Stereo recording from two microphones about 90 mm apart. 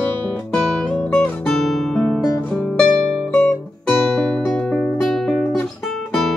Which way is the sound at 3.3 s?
15° left (ahead or behind).